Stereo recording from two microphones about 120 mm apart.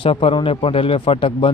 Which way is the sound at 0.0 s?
50° left (ahead or behind).